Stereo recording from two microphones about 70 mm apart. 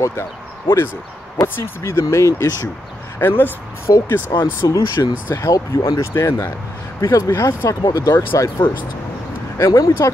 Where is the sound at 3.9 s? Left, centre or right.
Left.